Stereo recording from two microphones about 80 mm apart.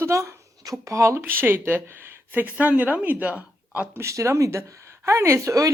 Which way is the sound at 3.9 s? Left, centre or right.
Right.